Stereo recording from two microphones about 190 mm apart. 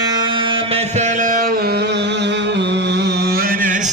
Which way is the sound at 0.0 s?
20° right (ahead or behind).